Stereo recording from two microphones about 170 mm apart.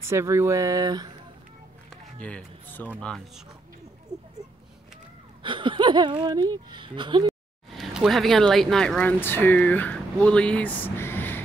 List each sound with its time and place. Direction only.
0.0 s speech: 15° right (ahead or behind)
1.9 s speech: 5° left (ahead or behind)
5.4 s speech: 30° right (ahead or behind)
7.7 s speech: centre (ahead or behind)